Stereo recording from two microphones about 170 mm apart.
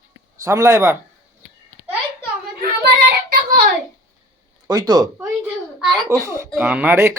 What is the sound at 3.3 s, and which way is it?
Child singing, 60° right (ahead or behind).